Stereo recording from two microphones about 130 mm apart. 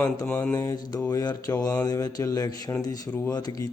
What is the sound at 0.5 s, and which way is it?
Speech, 25° left (ahead or behind).